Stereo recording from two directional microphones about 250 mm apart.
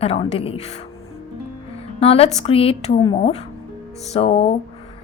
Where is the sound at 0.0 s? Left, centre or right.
Left.